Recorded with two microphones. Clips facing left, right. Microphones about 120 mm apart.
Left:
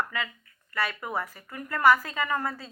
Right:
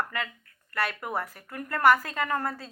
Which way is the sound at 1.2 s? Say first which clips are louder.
Even; 55° right (ahead or behind).